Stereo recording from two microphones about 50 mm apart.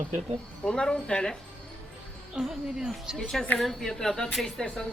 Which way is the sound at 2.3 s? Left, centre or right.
Centre.